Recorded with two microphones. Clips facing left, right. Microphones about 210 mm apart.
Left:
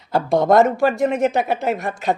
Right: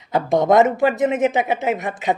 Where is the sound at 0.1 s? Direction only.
20° right (ahead or behind).